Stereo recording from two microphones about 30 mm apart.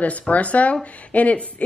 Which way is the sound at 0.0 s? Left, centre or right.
Left.